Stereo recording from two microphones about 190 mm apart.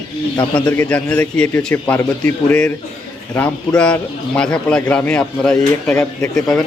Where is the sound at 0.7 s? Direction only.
5° left (ahead or behind).